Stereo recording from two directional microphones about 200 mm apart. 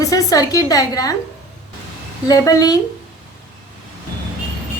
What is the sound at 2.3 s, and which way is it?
Speech, 15° left (ahead or behind).